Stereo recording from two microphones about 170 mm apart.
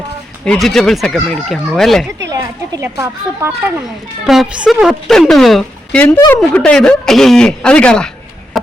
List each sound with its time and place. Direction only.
0.4 s a woman's voice: 5° left (ahead or behind)
2.2 s a woman's voice: 20° right (ahead or behind)
4.3 s a woman's voice: 5° right (ahead or behind)
8.5 s a sound: centre (ahead or behind)